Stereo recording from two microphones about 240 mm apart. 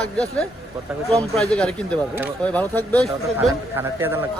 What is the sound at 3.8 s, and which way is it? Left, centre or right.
Speech, centre.